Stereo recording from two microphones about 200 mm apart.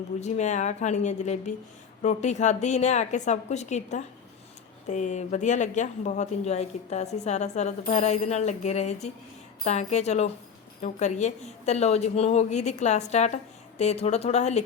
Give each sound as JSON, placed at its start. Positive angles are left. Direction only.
{"t": 0.2, "sound": "speech", "side_deg": 35}